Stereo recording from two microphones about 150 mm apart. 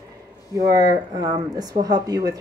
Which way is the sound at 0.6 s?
25° right (ahead or behind).